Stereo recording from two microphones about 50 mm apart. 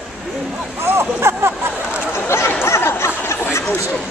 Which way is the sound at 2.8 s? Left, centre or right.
Left.